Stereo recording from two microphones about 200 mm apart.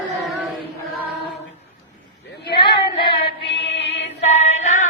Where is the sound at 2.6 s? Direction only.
25° left (ahead or behind).